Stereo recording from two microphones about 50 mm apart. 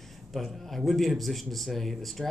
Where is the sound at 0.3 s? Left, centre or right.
Centre.